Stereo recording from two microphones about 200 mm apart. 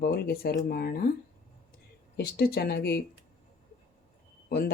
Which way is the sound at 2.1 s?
50° left (ahead or behind).